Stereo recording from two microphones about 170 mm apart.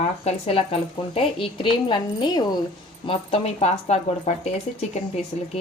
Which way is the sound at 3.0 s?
35° left (ahead or behind).